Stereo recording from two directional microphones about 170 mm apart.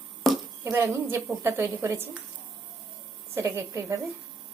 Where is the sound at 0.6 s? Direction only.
15° right (ahead or behind).